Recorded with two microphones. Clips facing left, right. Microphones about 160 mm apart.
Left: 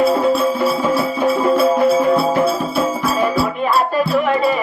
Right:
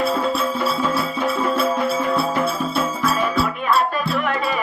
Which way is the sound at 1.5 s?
30° left (ahead or behind).